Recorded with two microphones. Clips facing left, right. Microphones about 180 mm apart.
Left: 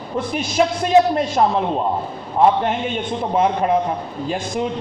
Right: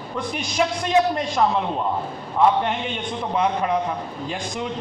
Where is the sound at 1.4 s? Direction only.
30° left (ahead or behind).